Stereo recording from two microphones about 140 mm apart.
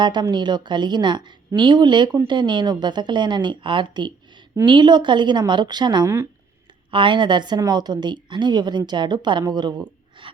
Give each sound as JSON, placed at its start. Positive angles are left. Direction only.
{"t": 0.0, "sound": "a woman's voice", "side_deg": -30}